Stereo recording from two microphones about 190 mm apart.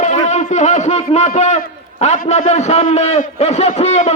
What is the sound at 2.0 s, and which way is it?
A man's voice, 35° left (ahead or behind).